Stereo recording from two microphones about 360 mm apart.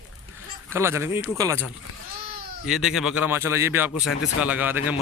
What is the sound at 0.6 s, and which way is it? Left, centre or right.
Speech, centre.